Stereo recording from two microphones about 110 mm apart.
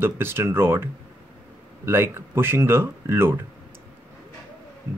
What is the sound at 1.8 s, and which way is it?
Speech, 20° right (ahead or behind).